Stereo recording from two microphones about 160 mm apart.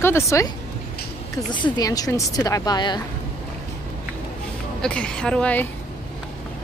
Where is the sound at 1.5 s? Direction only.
25° left (ahead or behind).